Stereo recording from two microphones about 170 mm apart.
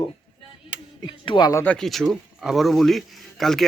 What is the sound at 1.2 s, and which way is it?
Speech, 25° left (ahead or behind).